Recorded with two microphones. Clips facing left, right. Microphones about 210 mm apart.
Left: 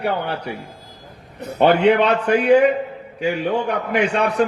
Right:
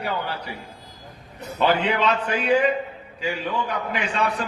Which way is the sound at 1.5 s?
60° left (ahead or behind).